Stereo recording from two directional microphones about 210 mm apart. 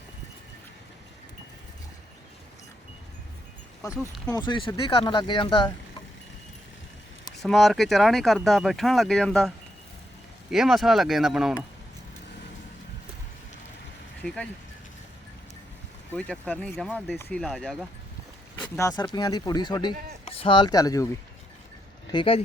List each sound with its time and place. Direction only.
3.8 s speech: 20° left (ahead or behind)
7.3 s speech: centre (ahead or behind)
10.5 s speech: centre (ahead or behind)
14.2 s speech: 5° left (ahead or behind)
16.1 s speech: 5° left (ahead or behind)
18.6 s speech: 15° left (ahead or behind)
22.1 s speech: 25° left (ahead or behind)